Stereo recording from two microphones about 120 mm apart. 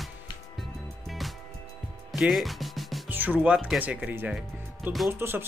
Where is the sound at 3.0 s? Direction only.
15° right (ahead or behind).